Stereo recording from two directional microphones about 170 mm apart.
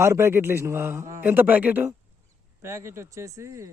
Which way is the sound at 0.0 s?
15° right (ahead or behind).